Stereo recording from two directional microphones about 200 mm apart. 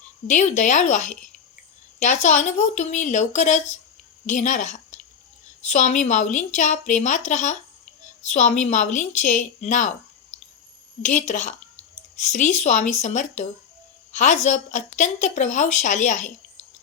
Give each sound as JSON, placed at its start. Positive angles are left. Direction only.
{"t": 0.3, "sound": "a woman's voice", "side_deg": 35}
{"t": 10.3, "sound": "a sound", "side_deg": 35}
{"t": 11.0, "sound": "a woman's voice", "side_deg": 35}